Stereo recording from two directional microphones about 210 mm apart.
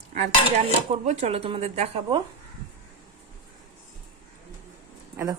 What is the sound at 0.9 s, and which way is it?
Speech, 30° right (ahead or behind).